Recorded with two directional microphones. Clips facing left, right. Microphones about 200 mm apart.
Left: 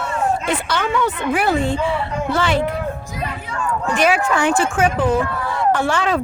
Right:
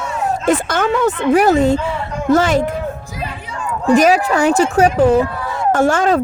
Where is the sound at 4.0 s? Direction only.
40° right (ahead or behind).